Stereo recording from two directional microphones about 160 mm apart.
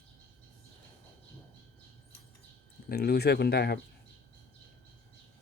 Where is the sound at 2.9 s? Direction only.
80° left.